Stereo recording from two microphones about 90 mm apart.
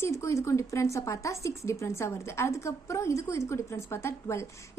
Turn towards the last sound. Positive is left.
turn(degrees=30)  # may be behind; listen again after turning